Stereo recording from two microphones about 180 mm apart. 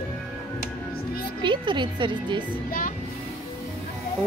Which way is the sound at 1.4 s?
25° right (ahead or behind).